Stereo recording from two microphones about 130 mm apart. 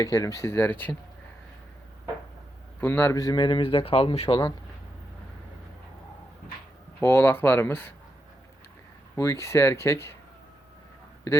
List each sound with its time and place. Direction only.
0.0 s speech: 25° left (ahead or behind)
2.8 s a man's voice: 20° left (ahead or behind); by 4.4 s 45° left (ahead or behind)
7.0 s speech: 20° left (ahead or behind)
9.1 s speech: 20° left (ahead or behind)